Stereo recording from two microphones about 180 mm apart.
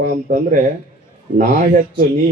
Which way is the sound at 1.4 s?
55° right (ahead or behind).